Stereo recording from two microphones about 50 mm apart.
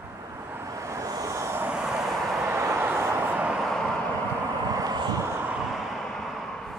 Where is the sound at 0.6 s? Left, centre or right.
Right.